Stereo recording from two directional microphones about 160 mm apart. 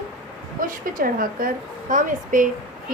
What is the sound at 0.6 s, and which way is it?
A woman's voice, 60° right (ahead or behind).